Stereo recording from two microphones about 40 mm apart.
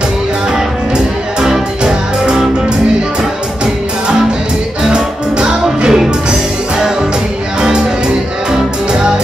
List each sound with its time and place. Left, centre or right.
1.4 s music: centre
4.8 s music: right